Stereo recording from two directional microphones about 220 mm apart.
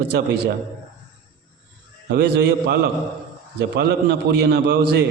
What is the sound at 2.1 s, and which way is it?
A man's voice, 50° right (ahead or behind).